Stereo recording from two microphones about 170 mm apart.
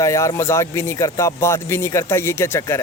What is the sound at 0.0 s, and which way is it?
Speech, 20° left (ahead or behind).